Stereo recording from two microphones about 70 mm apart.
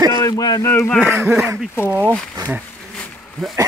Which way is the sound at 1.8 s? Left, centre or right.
Right.